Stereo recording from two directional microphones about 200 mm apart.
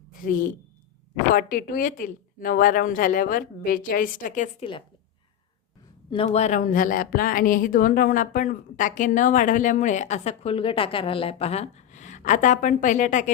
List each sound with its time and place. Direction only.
1.3 s speech: 45° left (ahead or behind)
6.1 s a woman's voice: 30° left (ahead or behind)